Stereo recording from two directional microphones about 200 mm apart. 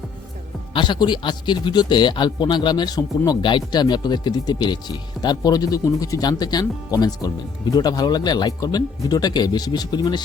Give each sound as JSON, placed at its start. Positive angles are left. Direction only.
{"t": 0.7, "sound": "speech", "side_deg": 25}